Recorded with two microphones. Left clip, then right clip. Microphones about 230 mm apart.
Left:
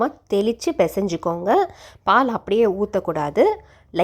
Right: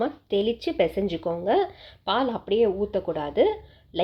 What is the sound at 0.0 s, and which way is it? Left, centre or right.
A woman's voice, left.